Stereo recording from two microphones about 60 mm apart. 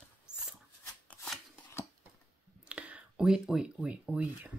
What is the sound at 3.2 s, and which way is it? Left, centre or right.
Speech, centre.